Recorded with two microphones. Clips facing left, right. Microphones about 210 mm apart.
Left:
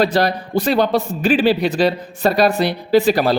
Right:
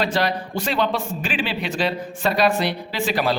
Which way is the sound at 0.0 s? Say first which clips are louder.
Left 6 dB; 40° left (ahead or behind).